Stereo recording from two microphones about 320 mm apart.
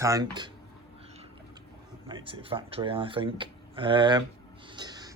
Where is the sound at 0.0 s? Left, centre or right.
Centre.